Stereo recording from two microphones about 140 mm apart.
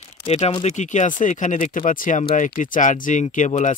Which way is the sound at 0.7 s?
60° left (ahead or behind).